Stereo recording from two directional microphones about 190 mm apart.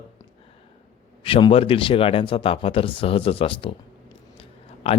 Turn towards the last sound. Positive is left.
turn(degrees=30)  # may be behind; listen again after turning